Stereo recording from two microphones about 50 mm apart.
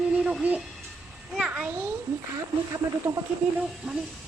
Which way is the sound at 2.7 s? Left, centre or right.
Right.